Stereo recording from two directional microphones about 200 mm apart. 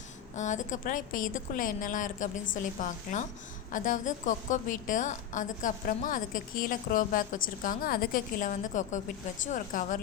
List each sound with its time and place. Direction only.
0.3 s a woman's voice: 40° left (ahead or behind)